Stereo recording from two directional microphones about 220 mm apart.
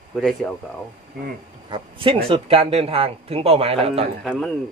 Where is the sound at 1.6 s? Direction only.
20° right (ahead or behind).